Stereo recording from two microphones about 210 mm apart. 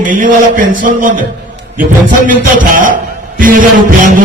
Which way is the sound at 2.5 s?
40° right (ahead or behind).